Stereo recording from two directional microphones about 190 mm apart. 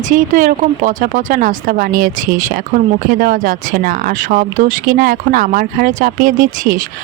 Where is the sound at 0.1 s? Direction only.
40° right (ahead or behind).